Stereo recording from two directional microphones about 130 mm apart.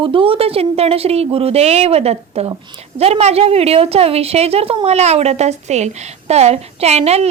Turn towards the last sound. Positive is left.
turn(degrees=-55)  # may be behind; listen again after turning